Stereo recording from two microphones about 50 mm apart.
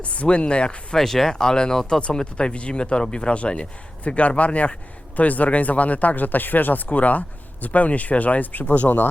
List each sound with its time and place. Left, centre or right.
0.0 s speech: left
0.9 s speech: centre; by 9.0 s left